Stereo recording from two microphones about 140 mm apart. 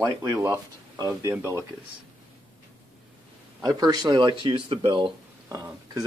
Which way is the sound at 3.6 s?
25° right (ahead or behind).